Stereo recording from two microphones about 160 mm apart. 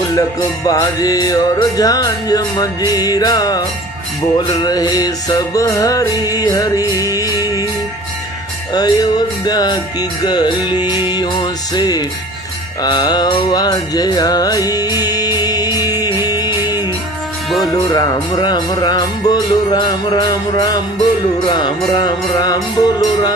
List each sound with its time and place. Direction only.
0.2 s music: 20° left (ahead or behind)
8.7 s music: 25° left (ahead or behind)